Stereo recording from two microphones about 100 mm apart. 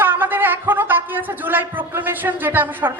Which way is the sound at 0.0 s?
20° right (ahead or behind).